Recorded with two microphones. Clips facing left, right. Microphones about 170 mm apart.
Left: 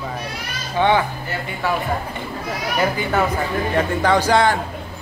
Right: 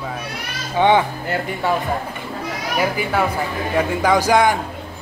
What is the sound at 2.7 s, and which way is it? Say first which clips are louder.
A man's voice: even; 10° right (ahead or behind).